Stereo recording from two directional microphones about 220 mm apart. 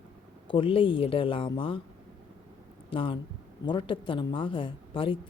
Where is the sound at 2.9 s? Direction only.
25° left (ahead or behind).